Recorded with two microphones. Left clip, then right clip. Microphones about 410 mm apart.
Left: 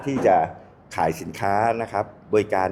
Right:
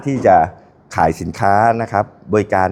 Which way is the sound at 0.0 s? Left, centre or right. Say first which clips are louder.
Right 7 dB; right.